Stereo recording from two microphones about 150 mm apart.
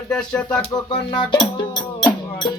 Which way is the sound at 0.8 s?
30° left (ahead or behind).